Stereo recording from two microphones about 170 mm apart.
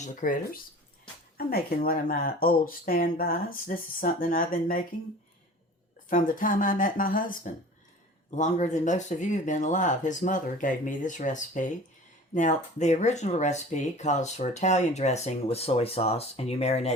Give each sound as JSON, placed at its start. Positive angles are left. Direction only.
{"t": 0.0, "sound": "speech", "side_deg": 50}
{"t": 6.1, "sound": "speech", "side_deg": 55}